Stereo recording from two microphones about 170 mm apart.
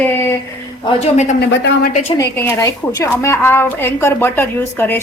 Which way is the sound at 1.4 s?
75° left (ahead or behind).